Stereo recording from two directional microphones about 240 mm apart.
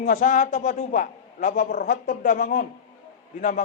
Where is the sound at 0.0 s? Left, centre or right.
Left.